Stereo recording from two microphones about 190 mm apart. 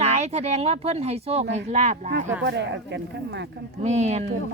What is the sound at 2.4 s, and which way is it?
Speech, 65° right (ahead or behind).